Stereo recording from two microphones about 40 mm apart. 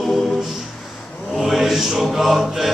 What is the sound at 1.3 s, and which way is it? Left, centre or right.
Mantra, centre.